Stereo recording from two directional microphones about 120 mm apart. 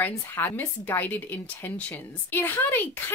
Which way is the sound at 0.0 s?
15° left (ahead or behind).